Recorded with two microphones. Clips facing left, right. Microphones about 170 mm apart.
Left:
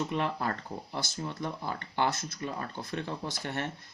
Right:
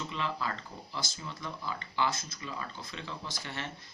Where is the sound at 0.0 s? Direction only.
55° left (ahead or behind).